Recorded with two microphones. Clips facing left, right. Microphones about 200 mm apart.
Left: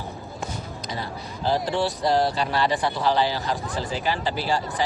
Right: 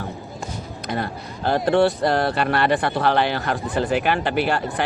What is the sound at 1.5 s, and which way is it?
Speech, 60° right (ahead or behind).